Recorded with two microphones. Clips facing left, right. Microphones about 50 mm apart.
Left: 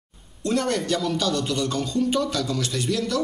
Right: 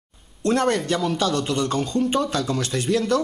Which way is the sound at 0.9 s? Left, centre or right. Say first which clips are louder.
Right 2 dB; right.